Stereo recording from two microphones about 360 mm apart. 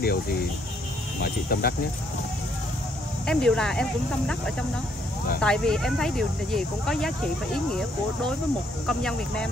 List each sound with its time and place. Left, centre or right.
0.0 s speech: left
3.3 s speech: centre
5.4 s speech: centre